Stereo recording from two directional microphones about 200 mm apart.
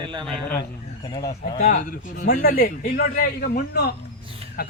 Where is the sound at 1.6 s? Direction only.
45° left (ahead or behind).